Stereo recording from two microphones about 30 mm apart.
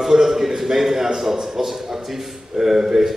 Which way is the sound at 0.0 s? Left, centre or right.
Centre.